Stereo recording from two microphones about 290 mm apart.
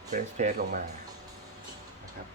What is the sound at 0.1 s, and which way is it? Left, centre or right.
Speech, right.